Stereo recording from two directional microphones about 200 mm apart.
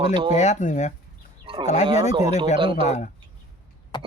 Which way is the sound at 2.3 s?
35° left (ahead or behind).